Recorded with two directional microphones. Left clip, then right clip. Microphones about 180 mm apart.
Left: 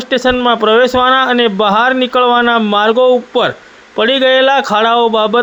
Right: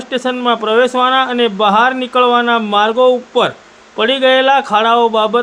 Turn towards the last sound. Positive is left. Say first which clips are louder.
# left 1 dB
turn(degrees=25)  # may be behind; listen again after turning